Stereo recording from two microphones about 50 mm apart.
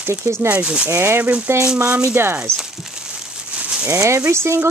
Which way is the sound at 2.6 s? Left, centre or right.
Centre.